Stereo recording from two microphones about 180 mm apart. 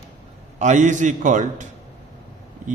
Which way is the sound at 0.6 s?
40° right (ahead or behind).